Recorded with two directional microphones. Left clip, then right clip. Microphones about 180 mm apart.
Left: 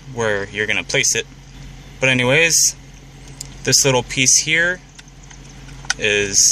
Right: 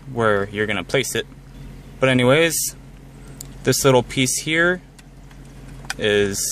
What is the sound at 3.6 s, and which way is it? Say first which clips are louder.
Speech: even; 45° right (ahead or behind).